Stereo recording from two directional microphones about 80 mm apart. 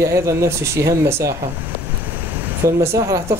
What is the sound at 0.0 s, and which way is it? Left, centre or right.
Speech, right.